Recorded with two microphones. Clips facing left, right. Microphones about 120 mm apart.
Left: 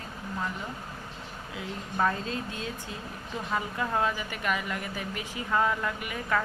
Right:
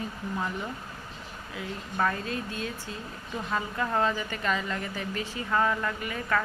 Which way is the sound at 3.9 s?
10° left (ahead or behind).